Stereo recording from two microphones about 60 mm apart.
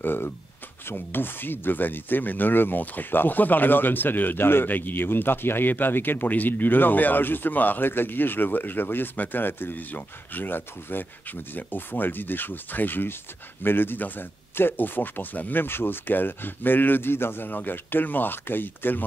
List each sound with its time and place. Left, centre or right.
0.0 s speech: left